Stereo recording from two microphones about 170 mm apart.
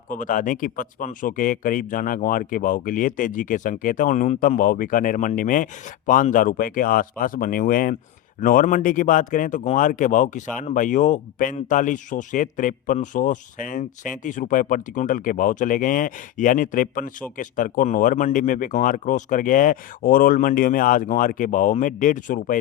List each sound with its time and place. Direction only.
0.1 s speech: 50° left (ahead or behind)